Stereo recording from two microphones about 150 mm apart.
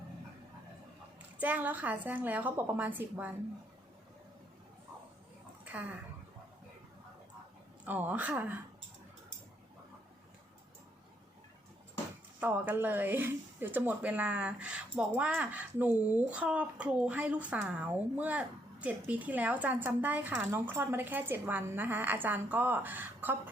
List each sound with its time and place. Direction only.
1.4 s speech: 10° right (ahead or behind)
5.6 s speech: 10° right (ahead or behind)
7.9 s speech: 10° right (ahead or behind)
12.4 s speech: 10° right (ahead or behind)